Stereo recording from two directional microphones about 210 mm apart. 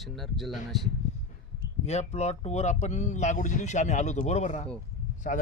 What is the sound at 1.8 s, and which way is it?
Speech, 30° left (ahead or behind).